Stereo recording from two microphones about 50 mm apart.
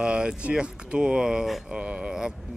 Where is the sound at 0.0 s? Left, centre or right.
Centre.